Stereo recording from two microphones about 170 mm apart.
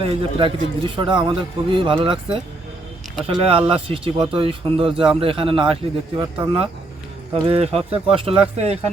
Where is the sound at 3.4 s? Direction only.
30° right (ahead or behind).